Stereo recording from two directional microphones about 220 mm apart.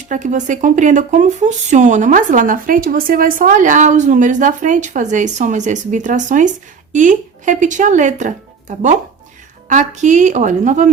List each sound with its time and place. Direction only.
0.1 s speech: 35° right (ahead or behind)